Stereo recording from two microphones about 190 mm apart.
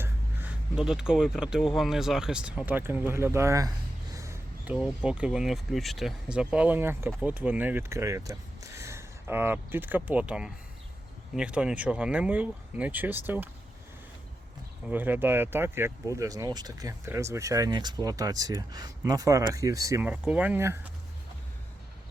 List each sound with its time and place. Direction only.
0.0 s speech: 10° right (ahead or behind)
14.8 s speech: 10° right (ahead or behind)